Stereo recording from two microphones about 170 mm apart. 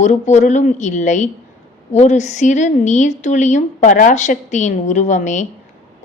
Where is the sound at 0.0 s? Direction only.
45° left (ahead or behind).